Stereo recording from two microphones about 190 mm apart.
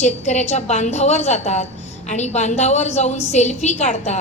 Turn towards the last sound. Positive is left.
turn(degrees=35)  # may be behind; listen again after turning